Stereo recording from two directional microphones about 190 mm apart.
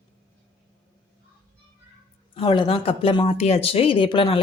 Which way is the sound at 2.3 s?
25° left (ahead or behind).